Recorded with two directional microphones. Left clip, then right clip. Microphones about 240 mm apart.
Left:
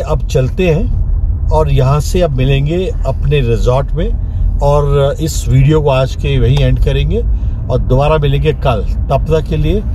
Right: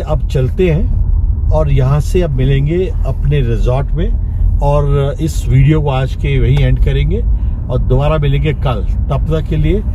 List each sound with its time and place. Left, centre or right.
0.1 s speech: left